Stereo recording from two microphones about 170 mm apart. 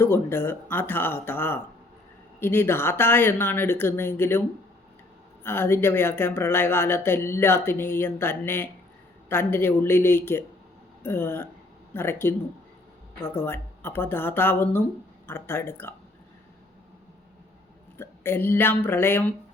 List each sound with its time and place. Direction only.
0.0 s speech: 15° left (ahead or behind)
13.3 s speech: 15° left (ahead or behind)
17.9 s speech: 15° left (ahead or behind)